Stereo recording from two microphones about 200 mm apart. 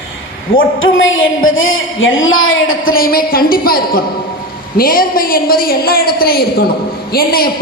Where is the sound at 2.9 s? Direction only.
50° left (ahead or behind).